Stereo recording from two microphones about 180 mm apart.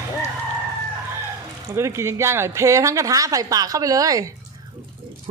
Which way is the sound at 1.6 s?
15° right (ahead or behind).